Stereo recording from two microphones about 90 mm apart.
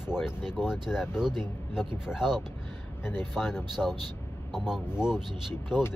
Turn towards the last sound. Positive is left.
turn(degrees=-10)  # may be behind; listen again after turning